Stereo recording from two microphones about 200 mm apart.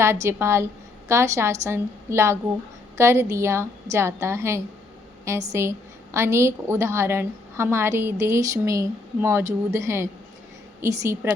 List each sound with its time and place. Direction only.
0.0 s a woman's voice: 15° right (ahead or behind)